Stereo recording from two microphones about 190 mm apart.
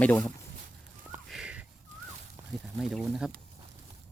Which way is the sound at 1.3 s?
5° right (ahead or behind).